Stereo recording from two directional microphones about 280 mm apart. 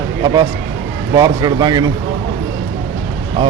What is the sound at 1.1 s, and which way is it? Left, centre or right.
Speech, centre.